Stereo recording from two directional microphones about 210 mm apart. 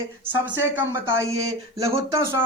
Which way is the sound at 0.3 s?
10° right (ahead or behind).